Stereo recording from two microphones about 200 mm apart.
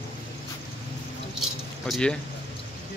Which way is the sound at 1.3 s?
Centre (ahead or behind).